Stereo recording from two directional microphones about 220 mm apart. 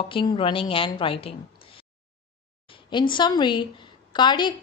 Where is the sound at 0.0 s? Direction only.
20° left (ahead or behind).